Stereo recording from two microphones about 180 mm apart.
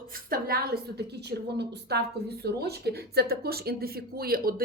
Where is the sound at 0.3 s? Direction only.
55° right (ahead or behind).